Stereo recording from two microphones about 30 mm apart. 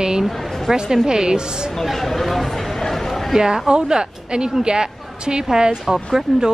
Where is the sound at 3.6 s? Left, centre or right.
Right.